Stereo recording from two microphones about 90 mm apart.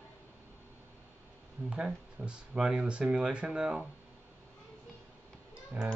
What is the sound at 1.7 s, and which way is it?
Speech, 10° right (ahead or behind).